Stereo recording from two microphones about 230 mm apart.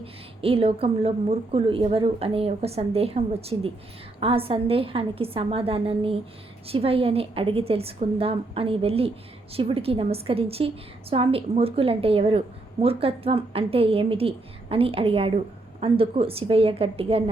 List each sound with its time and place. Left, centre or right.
0.0 s a woman's voice: right